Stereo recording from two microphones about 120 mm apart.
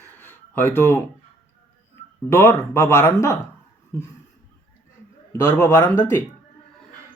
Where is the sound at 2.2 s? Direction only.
20° left (ahead or behind).